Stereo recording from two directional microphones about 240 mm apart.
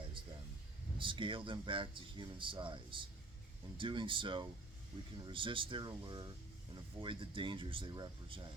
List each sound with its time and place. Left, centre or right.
0.9 s speech: right